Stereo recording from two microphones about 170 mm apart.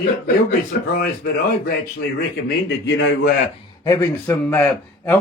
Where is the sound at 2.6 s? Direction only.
90° left.